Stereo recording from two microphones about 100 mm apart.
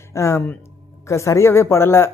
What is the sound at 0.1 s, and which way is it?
Speech, 30° left (ahead or behind).